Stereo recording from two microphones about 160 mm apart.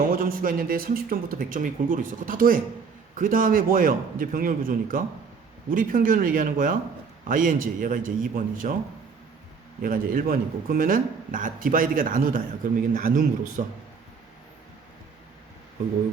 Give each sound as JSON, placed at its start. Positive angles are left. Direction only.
{"t": 0.1, "sound": "a man's voice", "side_deg": -65}
{"t": 9.8, "sound": "a man's voice", "side_deg": -65}